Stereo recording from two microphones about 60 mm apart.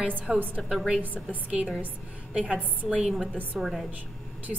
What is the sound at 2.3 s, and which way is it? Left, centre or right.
Speech, centre.